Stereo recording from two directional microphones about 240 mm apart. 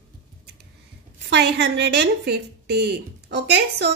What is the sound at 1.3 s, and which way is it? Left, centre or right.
Speech, right.